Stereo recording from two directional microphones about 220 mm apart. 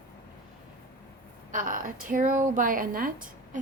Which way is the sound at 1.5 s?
35° right (ahead or behind).